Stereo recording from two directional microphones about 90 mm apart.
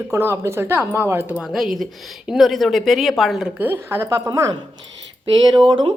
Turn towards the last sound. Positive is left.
turn(degrees=-65)  # may be behind; listen again after turning